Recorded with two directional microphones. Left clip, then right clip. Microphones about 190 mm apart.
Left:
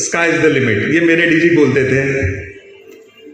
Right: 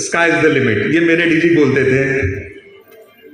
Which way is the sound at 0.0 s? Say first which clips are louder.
Even; 25° left (ahead or behind).